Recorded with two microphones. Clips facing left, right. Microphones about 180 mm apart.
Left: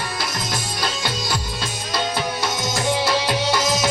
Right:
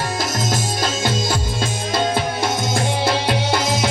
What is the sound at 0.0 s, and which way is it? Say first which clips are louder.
Music: right 5 dB; 45° right (ahead or behind).